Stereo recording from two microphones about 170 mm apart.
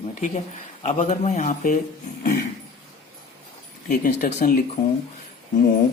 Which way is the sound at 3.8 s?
50° left (ahead or behind).